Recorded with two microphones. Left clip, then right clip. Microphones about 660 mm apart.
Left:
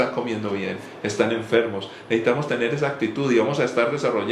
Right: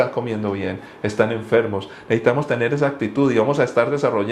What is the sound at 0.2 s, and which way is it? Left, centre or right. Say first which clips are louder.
Speech: right 2 dB; right.